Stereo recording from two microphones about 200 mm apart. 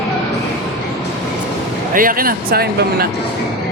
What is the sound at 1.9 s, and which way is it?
Speech, 45° right (ahead or behind).